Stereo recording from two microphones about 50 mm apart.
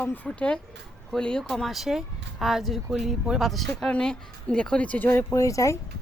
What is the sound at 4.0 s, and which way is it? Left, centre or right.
Speech, centre.